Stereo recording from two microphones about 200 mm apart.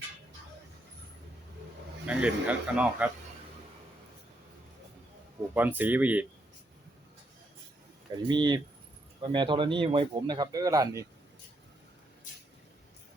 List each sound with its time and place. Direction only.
2.0 s a man's voice: 5° right (ahead or behind)
5.5 s a man's voice: 10° right (ahead or behind)
8.1 s speech: 20° right (ahead or behind)